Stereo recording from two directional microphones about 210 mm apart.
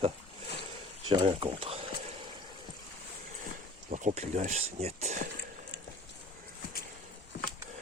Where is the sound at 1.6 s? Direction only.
25° right (ahead or behind).